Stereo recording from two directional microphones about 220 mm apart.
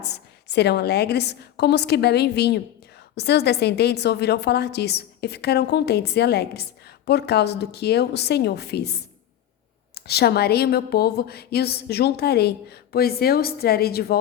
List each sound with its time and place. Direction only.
0.0 s a woman's voice: 50° left (ahead or behind)